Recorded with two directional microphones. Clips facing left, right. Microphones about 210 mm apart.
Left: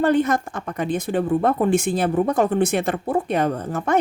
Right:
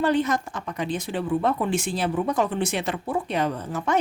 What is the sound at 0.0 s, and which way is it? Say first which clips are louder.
A woman's voice: left 4 dB; 50° left (ahead or behind).